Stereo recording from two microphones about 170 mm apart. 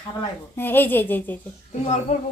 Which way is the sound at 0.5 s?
10° left (ahead or behind).